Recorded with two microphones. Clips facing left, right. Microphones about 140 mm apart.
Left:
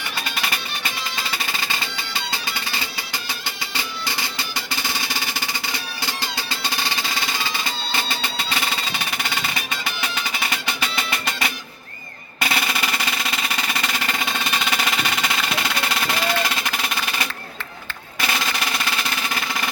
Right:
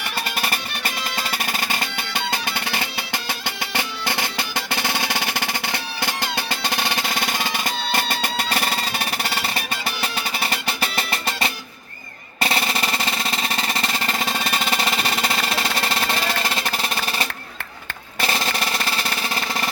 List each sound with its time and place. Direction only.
1.1 s music: 45° right (ahead or behind)
18.2 s drum: 30° right (ahead or behind)